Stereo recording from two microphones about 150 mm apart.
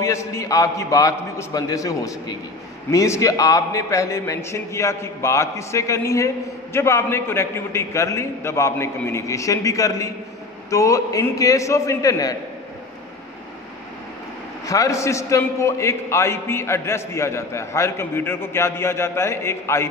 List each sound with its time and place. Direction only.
0.0 s a man's voice: 20° left (ahead or behind)
14.7 s a man's voice: 20° left (ahead or behind)